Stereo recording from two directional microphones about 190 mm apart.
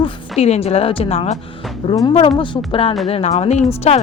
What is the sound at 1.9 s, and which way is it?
Speech, 20° left (ahead or behind).